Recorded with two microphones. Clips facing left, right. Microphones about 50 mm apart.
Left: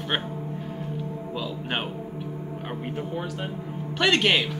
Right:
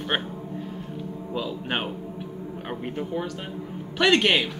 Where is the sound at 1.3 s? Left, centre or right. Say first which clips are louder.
Right 3 dB; centre.